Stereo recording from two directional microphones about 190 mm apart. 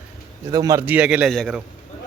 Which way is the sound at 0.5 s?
20° right (ahead or behind).